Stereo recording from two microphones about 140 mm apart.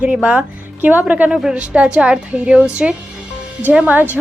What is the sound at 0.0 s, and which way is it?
A woman's voice, 10° right (ahead or behind).